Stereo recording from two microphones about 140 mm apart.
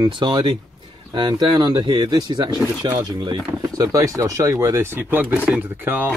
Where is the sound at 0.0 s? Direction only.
30° right (ahead or behind).